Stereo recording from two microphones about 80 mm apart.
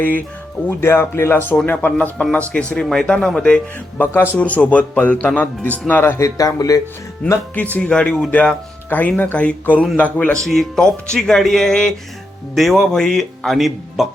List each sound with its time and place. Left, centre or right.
0.7 s speech: left; by 3.6 s centre
3.9 s speech: left
4.4 s speech: centre
6.1 s a man's voice: left
7.5 s speech: centre
10.4 s speech: centre